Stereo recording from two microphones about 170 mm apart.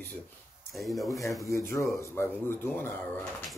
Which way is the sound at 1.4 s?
20° left (ahead or behind).